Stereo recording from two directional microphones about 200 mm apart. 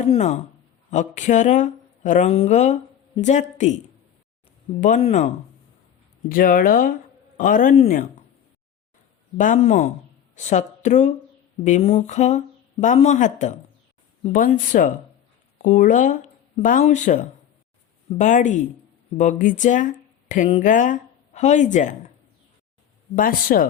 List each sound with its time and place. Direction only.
0.0 s speech: 35° left (ahead or behind)
4.8 s speech: 35° left (ahead or behind)
6.2 s speech: 45° left (ahead or behind)
9.4 s speech: 35° left (ahead or behind)
23.1 s speech: 45° left (ahead or behind)